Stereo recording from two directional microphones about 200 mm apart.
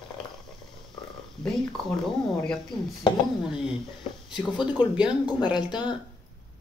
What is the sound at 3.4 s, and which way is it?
Speech, 5° right (ahead or behind).